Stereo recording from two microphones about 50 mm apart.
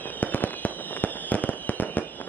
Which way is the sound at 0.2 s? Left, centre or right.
Left.